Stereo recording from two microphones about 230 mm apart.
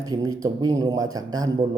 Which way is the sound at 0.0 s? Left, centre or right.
Centre.